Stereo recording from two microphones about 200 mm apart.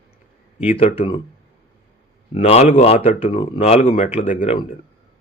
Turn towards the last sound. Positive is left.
turn(degrees=40)  # may be behind; listen again after turning